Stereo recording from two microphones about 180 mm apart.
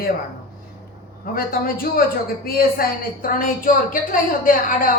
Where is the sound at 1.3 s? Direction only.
55° left (ahead or behind).